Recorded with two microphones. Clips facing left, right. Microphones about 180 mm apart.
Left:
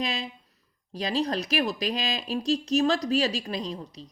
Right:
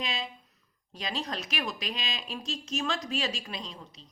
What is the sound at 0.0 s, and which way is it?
Speech, 35° left (ahead or behind).